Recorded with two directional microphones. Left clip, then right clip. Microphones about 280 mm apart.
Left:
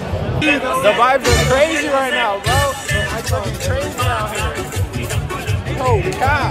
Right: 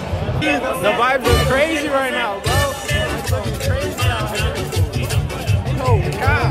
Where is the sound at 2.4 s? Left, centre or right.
Right.